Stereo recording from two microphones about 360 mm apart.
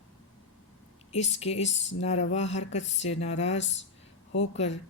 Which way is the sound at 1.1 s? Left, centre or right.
Centre.